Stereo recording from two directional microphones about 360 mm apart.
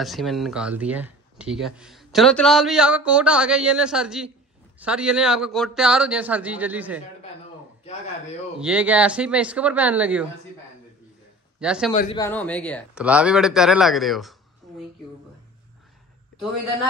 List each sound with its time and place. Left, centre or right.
0.0 s speech: centre
8.5 s speech: centre
11.6 s speech: centre
11.9 s speech: centre
12.2 s speech: centre